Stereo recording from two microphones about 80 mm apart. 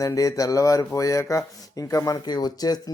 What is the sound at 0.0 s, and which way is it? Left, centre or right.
Speech, left.